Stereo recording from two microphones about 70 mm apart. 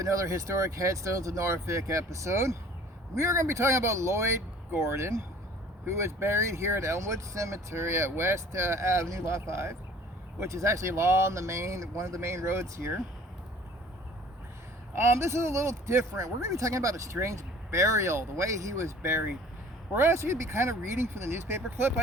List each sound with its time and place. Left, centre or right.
0.0 s speech: right
14.9 s speech: right